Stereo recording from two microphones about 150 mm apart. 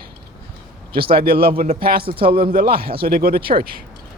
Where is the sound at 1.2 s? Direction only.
90° right.